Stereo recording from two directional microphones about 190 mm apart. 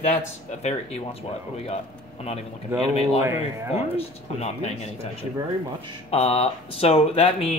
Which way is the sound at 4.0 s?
35° left (ahead or behind).